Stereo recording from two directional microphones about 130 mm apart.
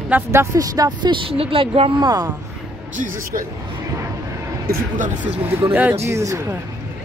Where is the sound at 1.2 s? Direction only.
45° right (ahead or behind).